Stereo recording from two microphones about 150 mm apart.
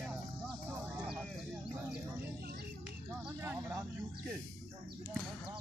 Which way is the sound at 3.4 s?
15° right (ahead or behind).